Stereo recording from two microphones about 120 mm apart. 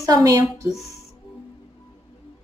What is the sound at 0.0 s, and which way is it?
Speech, 30° right (ahead or behind).